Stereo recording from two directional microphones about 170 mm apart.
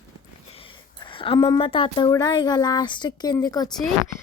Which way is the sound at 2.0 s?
20° left (ahead or behind).